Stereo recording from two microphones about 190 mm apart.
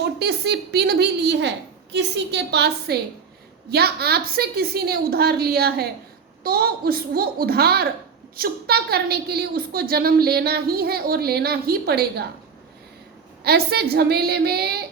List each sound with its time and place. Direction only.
0.2 s a woman's voice: 60° right (ahead or behind)
13.4 s a woman's voice: 55° right (ahead or behind)